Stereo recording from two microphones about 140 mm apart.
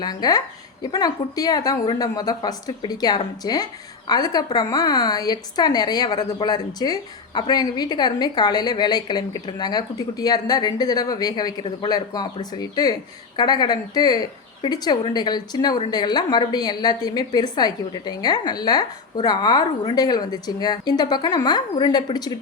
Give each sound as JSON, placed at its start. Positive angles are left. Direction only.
{"t": 0.0, "sound": "a woman's voice", "side_deg": 30}